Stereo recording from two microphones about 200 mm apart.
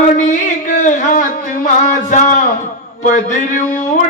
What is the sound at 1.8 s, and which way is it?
A man's voice, 35° left (ahead or behind).